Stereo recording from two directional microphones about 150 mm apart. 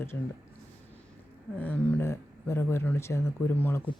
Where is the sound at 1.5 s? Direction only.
10° left (ahead or behind).